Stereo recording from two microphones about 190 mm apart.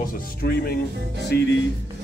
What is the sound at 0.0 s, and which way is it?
Speech, 50° left (ahead or behind).